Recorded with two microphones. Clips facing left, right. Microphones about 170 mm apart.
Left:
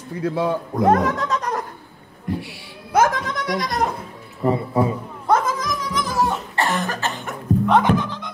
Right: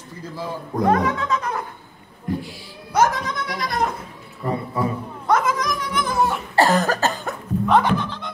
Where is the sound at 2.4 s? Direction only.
60° left (ahead or behind); by 3.8 s 40° left (ahead or behind).